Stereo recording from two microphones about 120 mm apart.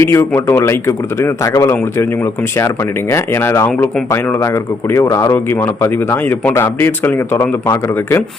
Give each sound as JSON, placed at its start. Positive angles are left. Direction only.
{"t": 0.0, "sound": "speech", "side_deg": 20}
{"t": 1.7, "sound": "speech", "side_deg": 15}
{"t": 5.3, "sound": "a man's voice", "side_deg": 20}